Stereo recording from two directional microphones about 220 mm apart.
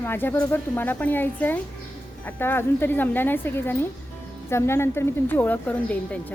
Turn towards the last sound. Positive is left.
turn(degrees=5)  # may be behind; listen again after turning